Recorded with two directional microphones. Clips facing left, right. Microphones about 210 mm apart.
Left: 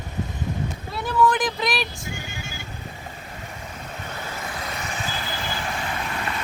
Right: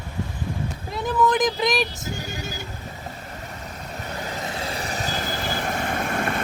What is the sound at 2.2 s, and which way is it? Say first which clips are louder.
Music: right 4 dB; 40° right (ahead or behind).